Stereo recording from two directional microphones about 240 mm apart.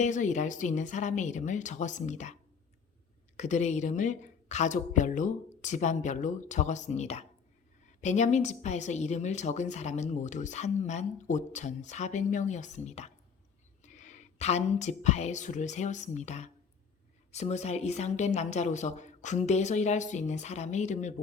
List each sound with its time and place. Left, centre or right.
0.0 s a woman's voice: left
3.3 s a woman's voice: left